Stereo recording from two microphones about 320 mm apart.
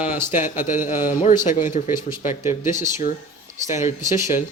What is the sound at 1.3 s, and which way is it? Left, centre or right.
Speech, centre.